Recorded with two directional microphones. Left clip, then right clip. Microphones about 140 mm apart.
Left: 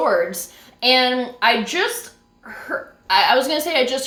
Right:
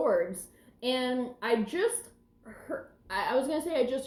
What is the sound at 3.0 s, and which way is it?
A woman's voice, 15° left (ahead or behind).